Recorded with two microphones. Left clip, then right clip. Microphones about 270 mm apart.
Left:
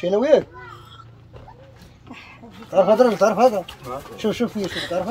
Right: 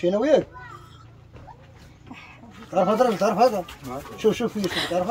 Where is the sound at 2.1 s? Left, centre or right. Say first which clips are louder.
Left 3 dB; left.